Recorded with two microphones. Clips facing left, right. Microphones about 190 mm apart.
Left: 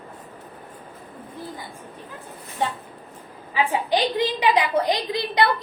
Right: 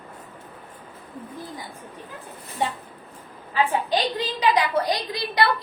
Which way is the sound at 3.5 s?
15° left (ahead or behind).